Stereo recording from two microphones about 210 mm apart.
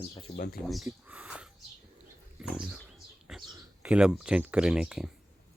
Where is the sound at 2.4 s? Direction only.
5° right (ahead or behind).